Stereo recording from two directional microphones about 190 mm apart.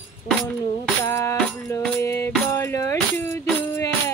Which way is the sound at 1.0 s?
15° left (ahead or behind).